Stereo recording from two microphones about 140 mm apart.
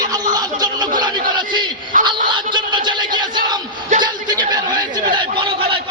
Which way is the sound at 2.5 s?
35° right (ahead or behind).